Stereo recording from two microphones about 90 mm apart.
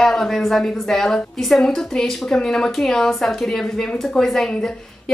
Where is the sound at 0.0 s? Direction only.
5° left (ahead or behind).